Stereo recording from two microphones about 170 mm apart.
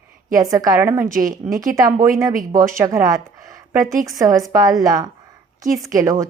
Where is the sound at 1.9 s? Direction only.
50° right (ahead or behind).